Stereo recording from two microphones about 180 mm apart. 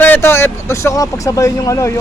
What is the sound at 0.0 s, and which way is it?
Speech, 10° left (ahead or behind).